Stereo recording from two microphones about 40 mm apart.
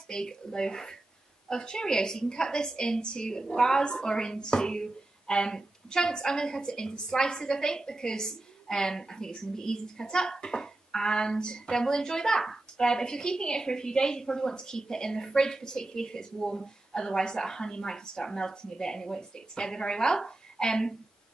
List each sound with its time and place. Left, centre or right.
0.1 s a woman's voice: centre